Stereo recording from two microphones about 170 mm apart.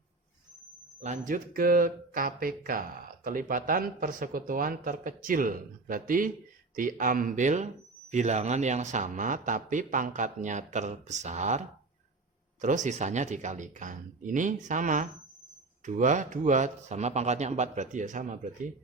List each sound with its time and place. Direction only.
1.0 s speech: 50° right (ahead or behind)
12.6 s speech: 45° right (ahead or behind)